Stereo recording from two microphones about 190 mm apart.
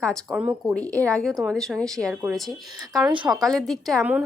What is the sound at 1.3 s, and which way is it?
Speech, 15° right (ahead or behind).